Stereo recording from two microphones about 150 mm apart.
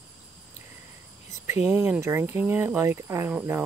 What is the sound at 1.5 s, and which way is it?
Speech, 15° right (ahead or behind).